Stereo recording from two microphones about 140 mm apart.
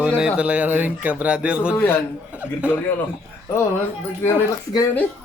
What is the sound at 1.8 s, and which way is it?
Speech, 15° left (ahead or behind).